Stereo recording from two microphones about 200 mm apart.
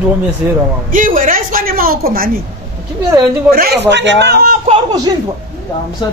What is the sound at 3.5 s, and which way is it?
Speech, 50° right (ahead or behind).